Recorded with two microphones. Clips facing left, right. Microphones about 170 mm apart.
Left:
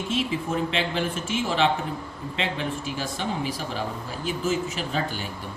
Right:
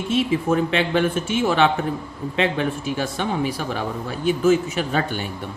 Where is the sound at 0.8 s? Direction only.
60° right (ahead or behind).